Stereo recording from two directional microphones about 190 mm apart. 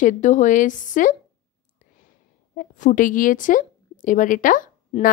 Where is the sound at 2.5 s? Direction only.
45° left (ahead or behind).